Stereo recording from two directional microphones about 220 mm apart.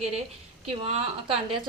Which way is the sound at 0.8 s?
30° right (ahead or behind).